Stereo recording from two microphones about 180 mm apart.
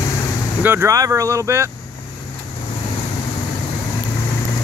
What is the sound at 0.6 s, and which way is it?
Speech, 10° right (ahead or behind).